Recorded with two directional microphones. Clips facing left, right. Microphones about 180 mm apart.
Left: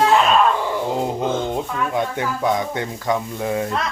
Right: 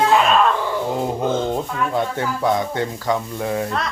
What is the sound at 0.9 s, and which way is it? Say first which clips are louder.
Speech: right 2 dB; 15° left (ahead or behind).